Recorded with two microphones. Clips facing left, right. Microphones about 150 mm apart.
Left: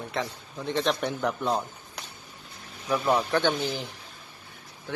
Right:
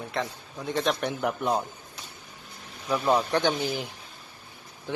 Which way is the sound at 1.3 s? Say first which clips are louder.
Right 2 dB; 15° right (ahead or behind).